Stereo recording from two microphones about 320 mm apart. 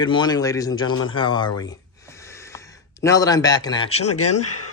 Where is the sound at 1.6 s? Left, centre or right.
Centre.